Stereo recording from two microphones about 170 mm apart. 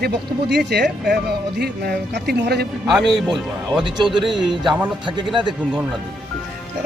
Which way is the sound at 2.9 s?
Centre (ahead or behind).